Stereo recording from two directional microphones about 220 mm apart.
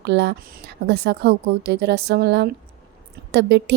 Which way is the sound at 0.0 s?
50° right (ahead or behind).